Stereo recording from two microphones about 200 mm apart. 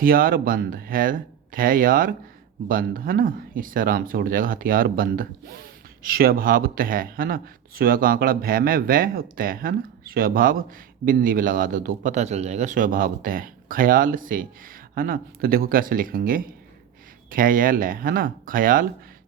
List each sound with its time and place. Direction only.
0.0 s speech: 45° right (ahead or behind)